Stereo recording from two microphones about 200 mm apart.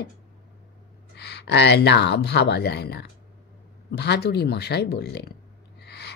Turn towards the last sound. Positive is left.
turn(degrees=60)  # may be behind; listen again after turning